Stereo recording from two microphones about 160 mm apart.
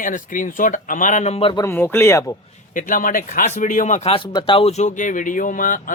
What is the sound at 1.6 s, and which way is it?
Speech, 15° left (ahead or behind).